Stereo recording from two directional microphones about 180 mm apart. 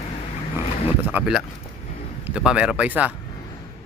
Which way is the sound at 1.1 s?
5° right (ahead or behind).